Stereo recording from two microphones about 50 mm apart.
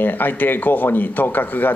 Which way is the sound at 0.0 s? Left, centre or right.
Left.